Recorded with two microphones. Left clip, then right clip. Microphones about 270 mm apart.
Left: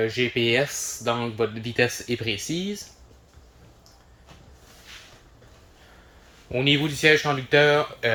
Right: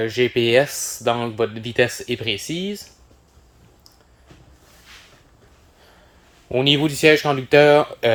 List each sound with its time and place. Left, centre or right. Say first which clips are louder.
0.0 s speech: right 4 dB; centre
6.5 s speech: right 5 dB; right